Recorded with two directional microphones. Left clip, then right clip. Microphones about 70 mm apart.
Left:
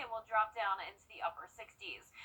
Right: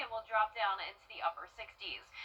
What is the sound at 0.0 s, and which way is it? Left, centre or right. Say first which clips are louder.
A woman's voice: right 1 dB; centre.